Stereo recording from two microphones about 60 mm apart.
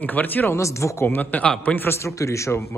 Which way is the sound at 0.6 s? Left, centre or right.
Left.